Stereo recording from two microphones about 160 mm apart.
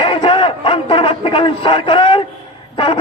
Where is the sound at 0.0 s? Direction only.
30° left (ahead or behind).